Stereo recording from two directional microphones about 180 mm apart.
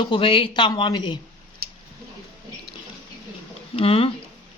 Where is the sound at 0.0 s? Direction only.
25° left (ahead or behind).